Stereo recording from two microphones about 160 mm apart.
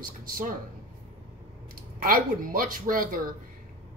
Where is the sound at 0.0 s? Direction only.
60° right (ahead or behind).